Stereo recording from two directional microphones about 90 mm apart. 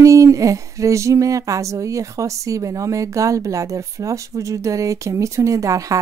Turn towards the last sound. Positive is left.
turn(degrees=-35)  # may be behind; listen again after turning